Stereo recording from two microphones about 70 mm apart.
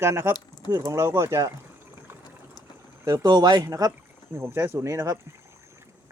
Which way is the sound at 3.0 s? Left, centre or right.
Right.